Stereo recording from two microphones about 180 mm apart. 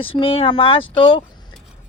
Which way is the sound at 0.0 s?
30° left (ahead or behind).